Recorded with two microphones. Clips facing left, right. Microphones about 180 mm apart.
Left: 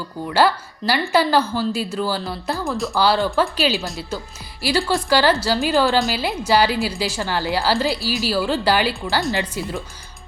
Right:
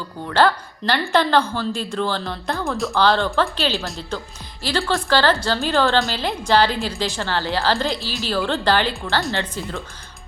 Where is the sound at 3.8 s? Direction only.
Centre (ahead or behind).